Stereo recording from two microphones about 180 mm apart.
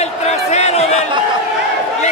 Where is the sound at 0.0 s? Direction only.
40° left (ahead or behind).